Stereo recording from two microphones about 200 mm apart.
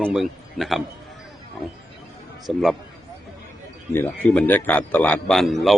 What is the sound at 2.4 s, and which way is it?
Speech, centre (ahead or behind).